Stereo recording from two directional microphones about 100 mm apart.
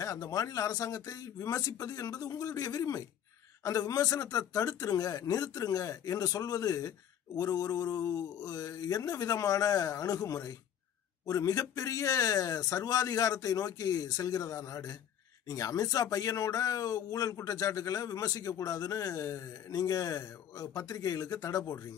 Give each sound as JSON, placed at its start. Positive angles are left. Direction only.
{"t": 0.0, "sound": "speech", "side_deg": 35}